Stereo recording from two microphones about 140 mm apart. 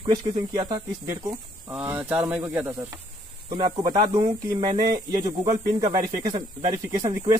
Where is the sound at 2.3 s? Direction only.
15° right (ahead or behind).